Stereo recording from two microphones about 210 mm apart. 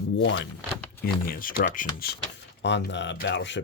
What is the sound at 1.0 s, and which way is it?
Speech, 45° left (ahead or behind).